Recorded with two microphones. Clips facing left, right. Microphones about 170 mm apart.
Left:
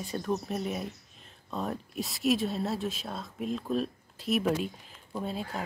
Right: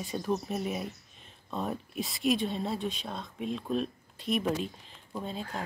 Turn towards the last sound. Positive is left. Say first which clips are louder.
# left 2 dB
turn(degrees=5)  # may be behind; listen again after turning